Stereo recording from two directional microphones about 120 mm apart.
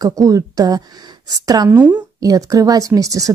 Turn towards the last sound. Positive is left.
turn(degrees=-30)  # may be behind; listen again after turning